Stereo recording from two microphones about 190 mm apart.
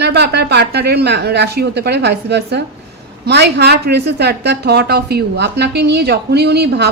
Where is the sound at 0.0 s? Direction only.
60° right (ahead or behind).